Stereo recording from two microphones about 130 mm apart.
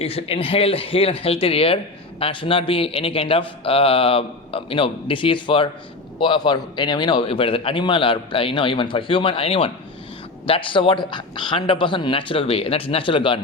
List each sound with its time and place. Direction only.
0.0 s a man's voice: 50° left (ahead or behind)